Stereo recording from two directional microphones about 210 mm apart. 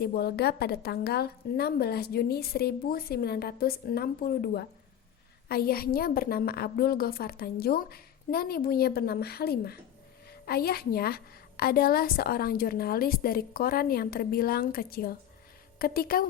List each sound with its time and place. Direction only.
0.0 s a woman's voice: 50° left (ahead or behind)